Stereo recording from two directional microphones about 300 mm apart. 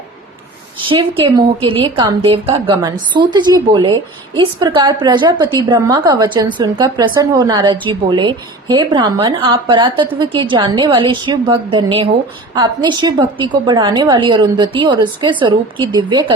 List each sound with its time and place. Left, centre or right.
0.9 s a woman's voice: centre